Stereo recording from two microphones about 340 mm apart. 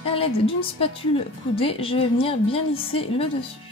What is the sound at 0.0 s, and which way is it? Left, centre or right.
A woman's voice, centre.